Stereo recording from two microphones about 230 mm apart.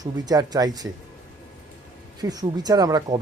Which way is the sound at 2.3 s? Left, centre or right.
Centre.